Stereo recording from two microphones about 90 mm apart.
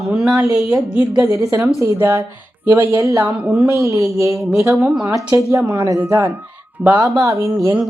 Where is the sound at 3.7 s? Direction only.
35° right (ahead or behind).